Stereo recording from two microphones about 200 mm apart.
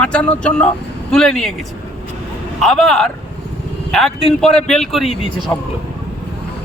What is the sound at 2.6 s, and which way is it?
Speech, centre (ahead or behind).